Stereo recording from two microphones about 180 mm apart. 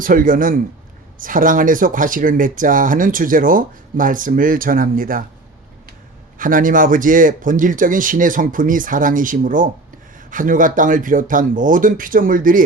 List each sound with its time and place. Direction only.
0.0 s speech: 50° right (ahead or behind)
6.4 s speech: 50° right (ahead or behind)